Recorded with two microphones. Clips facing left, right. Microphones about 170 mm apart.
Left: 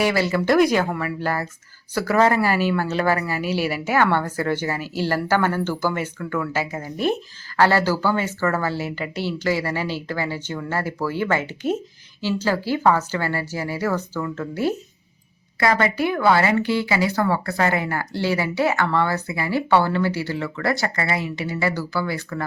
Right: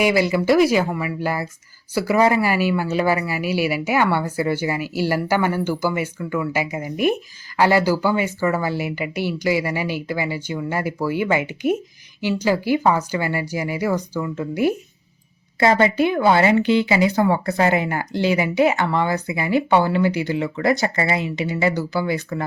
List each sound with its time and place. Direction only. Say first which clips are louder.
0.0 s speech: right 2 dB; 15° right (ahead or behind)
15.6 s speech: right 4 dB; 25° right (ahead or behind)